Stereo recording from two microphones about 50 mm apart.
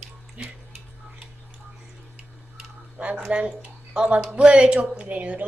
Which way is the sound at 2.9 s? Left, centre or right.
Right.